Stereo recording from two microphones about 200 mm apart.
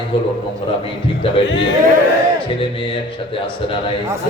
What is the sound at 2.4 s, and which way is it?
A man's voice, 25° left (ahead or behind).